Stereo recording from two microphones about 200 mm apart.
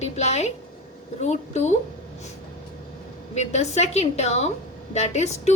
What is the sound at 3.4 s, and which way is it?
Speech, 35° left (ahead or behind).